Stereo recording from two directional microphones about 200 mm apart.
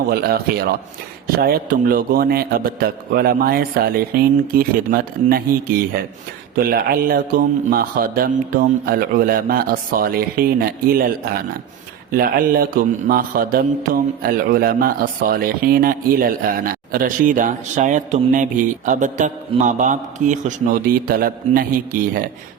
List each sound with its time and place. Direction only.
0.1 s speech: 50° right (ahead or behind)
12.1 s speech: 45° right (ahead or behind)